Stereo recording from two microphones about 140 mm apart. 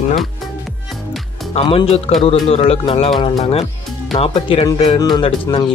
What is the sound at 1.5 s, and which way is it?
Speech, 45° left (ahead or behind).